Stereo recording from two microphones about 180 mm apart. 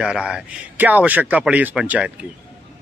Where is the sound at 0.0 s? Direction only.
5° right (ahead or behind).